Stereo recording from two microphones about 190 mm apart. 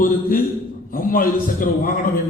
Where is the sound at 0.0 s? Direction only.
50° left (ahead or behind).